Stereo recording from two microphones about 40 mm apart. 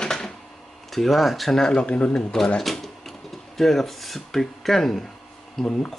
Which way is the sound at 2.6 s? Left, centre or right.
Centre.